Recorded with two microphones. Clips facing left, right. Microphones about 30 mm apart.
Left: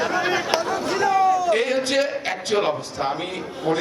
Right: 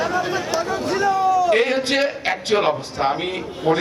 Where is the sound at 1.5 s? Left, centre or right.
Right.